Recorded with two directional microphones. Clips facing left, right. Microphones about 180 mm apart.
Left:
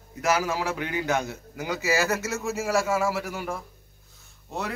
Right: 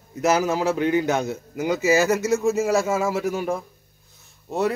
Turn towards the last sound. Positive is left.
turn(degrees=-20)  # may be behind; listen again after turning